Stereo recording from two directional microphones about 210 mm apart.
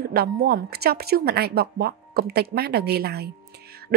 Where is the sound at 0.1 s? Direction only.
45° right (ahead or behind).